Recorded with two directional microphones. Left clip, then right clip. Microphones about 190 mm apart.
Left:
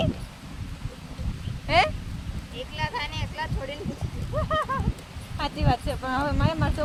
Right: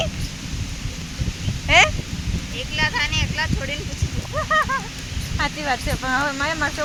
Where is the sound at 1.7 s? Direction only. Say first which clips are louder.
Right 7 dB; 20° right (ahead or behind).